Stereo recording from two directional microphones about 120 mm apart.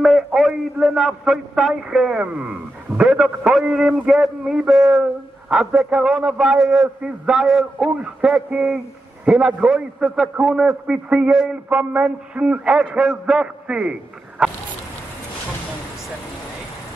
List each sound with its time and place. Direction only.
0.0 s a man's voice: centre (ahead or behind)